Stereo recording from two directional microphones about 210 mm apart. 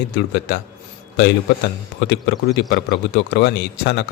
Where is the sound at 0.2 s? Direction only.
55° left (ahead or behind).